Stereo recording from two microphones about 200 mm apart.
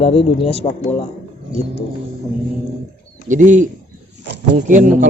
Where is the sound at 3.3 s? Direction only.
40° right (ahead or behind).